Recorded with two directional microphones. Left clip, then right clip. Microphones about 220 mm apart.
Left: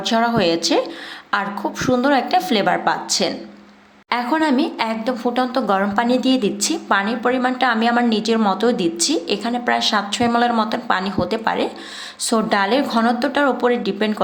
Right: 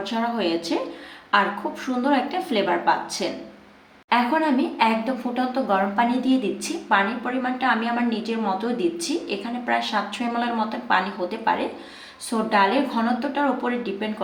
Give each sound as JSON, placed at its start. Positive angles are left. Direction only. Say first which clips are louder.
{"t": 0.0, "sound": "a woman's voice", "louder": "left 7 dB", "side_deg": 50}